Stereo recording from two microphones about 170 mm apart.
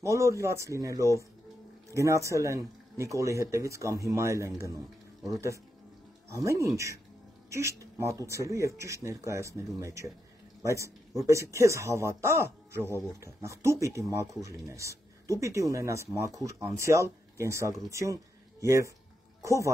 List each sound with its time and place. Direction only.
0.0 s speech: 20° right (ahead or behind)